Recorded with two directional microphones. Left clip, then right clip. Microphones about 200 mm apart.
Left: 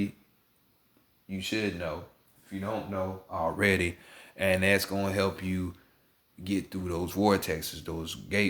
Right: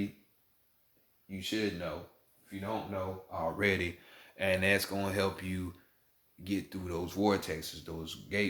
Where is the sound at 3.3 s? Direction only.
45° left (ahead or behind).